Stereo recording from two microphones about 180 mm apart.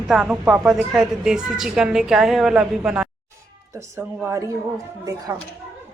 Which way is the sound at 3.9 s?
15° right (ahead or behind).